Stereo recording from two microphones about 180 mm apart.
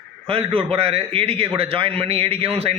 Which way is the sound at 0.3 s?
30° right (ahead or behind).